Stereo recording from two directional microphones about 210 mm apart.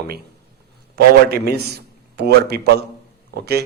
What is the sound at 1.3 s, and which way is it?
A man's voice, 50° right (ahead or behind).